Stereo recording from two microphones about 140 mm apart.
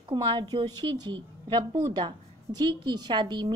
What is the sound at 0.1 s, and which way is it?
Speech, 35° right (ahead or behind).